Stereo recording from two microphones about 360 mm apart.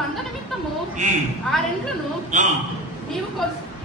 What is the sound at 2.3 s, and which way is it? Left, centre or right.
Speech, centre.